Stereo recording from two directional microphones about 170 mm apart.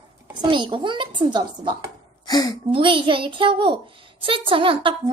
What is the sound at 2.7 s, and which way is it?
A child's voice, 30° right (ahead or behind).